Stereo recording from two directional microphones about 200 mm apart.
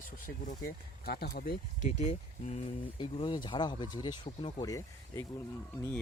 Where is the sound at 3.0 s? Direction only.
20° left (ahead or behind).